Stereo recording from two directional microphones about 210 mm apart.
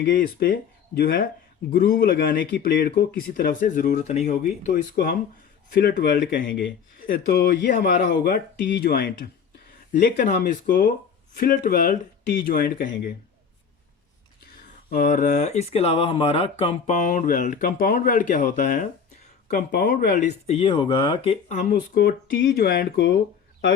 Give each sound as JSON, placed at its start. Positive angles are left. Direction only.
{"t": 0.2, "sound": "speech", "side_deg": 45}
{"t": 6.5, "sound": "speech", "side_deg": 60}
{"t": 7.1, "sound": "speech", "side_deg": 45}
{"t": 14.8, "sound": "speech", "side_deg": 40}
{"t": 21.7, "sound": "speech", "side_deg": 45}